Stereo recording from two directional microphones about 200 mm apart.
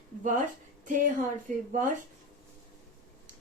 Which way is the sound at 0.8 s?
40° right (ahead or behind).